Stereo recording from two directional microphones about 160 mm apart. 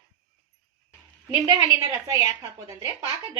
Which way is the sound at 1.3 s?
20° right (ahead or behind).